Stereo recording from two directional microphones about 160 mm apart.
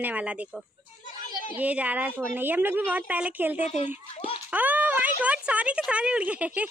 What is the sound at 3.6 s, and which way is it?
Speech, 45° left (ahead or behind).